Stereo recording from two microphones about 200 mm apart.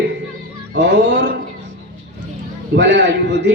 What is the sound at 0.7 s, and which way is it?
Speech, 65° right (ahead or behind).